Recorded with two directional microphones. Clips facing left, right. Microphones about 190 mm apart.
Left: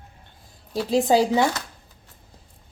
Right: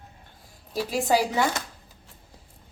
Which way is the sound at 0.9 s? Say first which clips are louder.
Left 5 dB; 25° left (ahead or behind).